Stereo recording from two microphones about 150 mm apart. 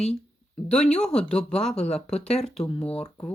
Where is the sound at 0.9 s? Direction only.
5° left (ahead or behind).